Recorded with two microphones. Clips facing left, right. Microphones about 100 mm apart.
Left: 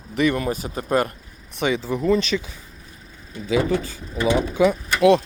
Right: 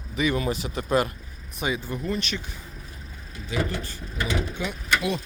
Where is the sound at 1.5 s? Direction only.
75° left (ahead or behind).